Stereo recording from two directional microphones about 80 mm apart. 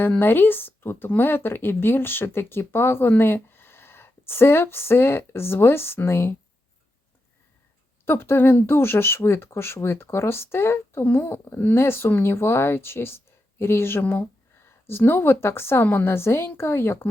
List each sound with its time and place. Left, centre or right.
0.2 s speech: left
8.0 s speech: left